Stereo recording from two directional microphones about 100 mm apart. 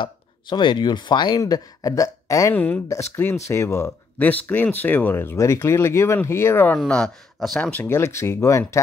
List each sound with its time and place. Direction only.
0.0 s speech: 50° left (ahead or behind)
1.4 s speech: 35° left (ahead or behind)
2.5 s speech: 15° left (ahead or behind)
2.9 s speech: 25° left (ahead or behind)
4.2 s speech: 15° left (ahead or behind)
6.9 s speech: 5° left (ahead or behind)
7.7 s speech: 20° left (ahead or behind)